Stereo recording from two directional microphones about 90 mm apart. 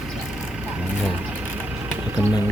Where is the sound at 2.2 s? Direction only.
30° right (ahead or behind).